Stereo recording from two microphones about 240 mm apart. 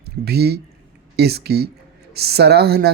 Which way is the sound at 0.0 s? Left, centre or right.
Right.